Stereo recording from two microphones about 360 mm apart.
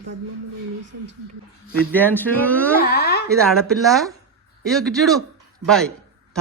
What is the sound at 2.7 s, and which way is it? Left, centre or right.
Speech, left.